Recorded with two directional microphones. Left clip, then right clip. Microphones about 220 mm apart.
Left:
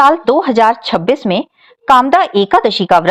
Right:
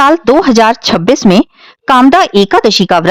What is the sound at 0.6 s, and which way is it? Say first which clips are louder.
Speech: right 3 dB; 50° right (ahead or behind).